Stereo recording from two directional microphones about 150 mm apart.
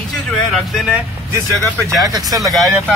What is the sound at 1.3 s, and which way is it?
Speech, 20° right (ahead or behind).